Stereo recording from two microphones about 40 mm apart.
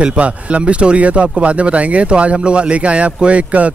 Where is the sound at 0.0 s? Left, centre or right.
Right.